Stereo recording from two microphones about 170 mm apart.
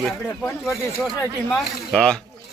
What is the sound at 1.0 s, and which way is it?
Speech, centre (ahead or behind).